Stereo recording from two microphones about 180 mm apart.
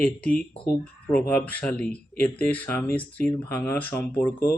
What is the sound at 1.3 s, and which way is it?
Speech, 5° left (ahead or behind).